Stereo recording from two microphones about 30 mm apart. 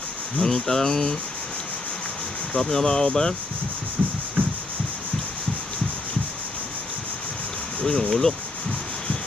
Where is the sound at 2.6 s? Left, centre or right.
Centre.